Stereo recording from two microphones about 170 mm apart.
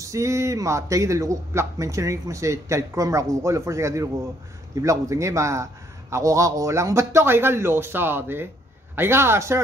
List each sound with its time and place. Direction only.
0.0 s a man's voice: 20° right (ahead or behind)